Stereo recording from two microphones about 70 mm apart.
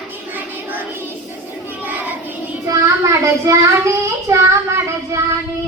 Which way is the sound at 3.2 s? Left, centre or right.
Right.